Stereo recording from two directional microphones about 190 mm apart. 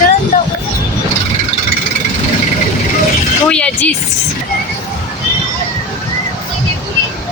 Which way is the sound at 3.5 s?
5° left (ahead or behind).